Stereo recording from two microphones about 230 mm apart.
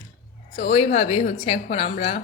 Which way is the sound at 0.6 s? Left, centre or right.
Left.